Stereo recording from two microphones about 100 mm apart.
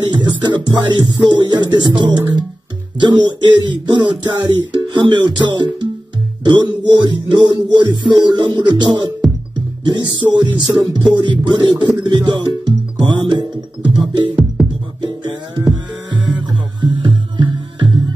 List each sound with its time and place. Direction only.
0.0 s music: 50° right (ahead or behind)
12.0 s speech: 50° right (ahead or behind)
14.6 s music: centre (ahead or behind)
15.0 s music: 50° right (ahead or behind)